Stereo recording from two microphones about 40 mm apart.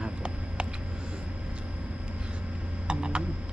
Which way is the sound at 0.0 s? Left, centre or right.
Right.